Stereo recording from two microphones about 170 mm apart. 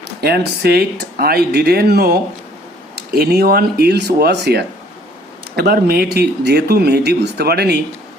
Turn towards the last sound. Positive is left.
turn(degrees=-70)  # may be behind; listen again after turning